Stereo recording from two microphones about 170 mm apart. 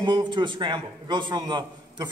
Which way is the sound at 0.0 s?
25° right (ahead or behind).